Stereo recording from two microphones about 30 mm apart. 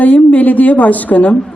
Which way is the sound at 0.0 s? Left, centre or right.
Left.